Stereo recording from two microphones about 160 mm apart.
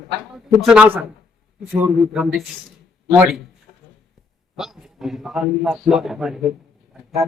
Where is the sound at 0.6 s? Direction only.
5° right (ahead or behind).